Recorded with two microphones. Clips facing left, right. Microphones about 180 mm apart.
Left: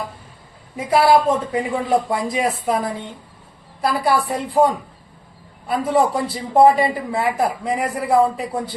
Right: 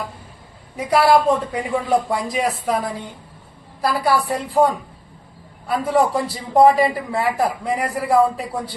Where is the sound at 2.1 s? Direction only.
Centre (ahead or behind).